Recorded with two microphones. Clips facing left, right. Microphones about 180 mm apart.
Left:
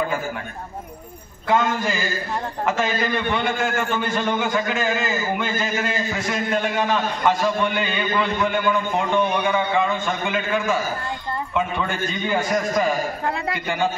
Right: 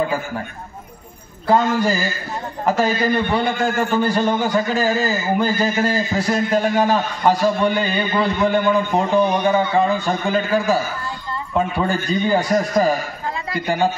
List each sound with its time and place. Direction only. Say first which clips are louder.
1.8 s a man's voice: right 5 dB; 40° right (ahead or behind)